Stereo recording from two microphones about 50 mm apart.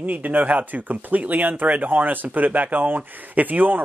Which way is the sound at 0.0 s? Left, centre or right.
Right.